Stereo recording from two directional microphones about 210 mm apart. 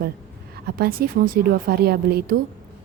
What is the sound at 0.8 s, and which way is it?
A woman's voice, 45° right (ahead or behind).